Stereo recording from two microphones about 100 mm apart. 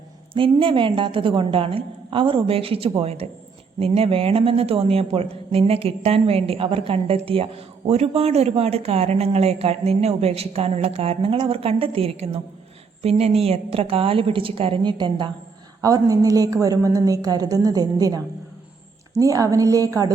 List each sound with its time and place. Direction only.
0.3 s a woman's voice: 60° right (ahead or behind)
3.0 s speech: 90° right
3.8 s a woman's voice: 75° right (ahead or behind)
13.0 s a woman's voice: 90° right; by 14.9 s 65° right (ahead or behind)
14.9 s a woman's voice: 50° right (ahead or behind)
15.8 s a woman's voice: 35° right (ahead or behind)
19.2 s a woman's voice: 35° right (ahead or behind)